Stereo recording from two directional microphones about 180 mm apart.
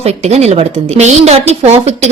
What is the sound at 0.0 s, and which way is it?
A woman's voice, 35° right (ahead or behind).